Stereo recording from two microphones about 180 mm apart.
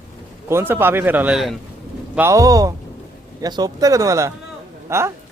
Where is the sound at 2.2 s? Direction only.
15° right (ahead or behind).